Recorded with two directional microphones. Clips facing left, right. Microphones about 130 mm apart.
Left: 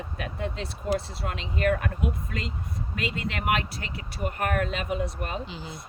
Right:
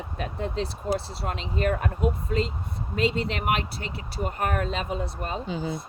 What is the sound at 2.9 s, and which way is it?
Speech, 30° right (ahead or behind).